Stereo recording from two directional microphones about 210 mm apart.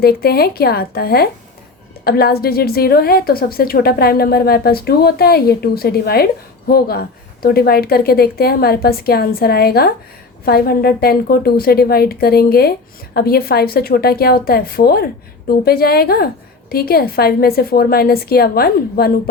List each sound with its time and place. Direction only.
0.0 s a woman's voice: 45° left (ahead or behind)